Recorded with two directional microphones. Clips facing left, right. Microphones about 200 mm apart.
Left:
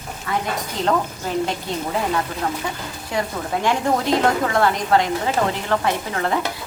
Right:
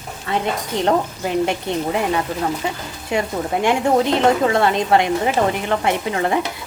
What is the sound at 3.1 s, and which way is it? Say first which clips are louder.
A woman's voice: right 4 dB; 20° right (ahead or behind).